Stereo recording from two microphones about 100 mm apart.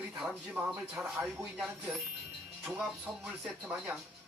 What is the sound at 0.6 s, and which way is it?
Speech, 20° right (ahead or behind).